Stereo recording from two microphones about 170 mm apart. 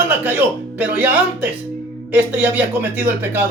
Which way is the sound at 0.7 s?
10° right (ahead or behind).